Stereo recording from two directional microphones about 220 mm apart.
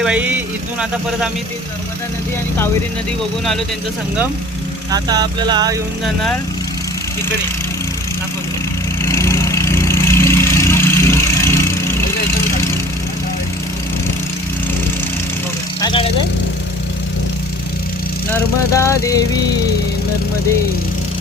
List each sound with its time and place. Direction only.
0.0 s a sound: 5° right (ahead or behind)
4.9 s speech: 15° right (ahead or behind)
9.0 s vehicle: 10° left (ahead or behind)
15.8 s vehicle: 20° left (ahead or behind)
18.3 s vehicle: 15° left (ahead or behind)